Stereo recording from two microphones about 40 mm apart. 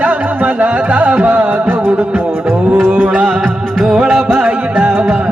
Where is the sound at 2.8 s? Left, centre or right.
Right.